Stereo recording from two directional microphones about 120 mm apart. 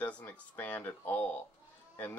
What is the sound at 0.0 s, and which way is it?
Speech, 10° left (ahead or behind).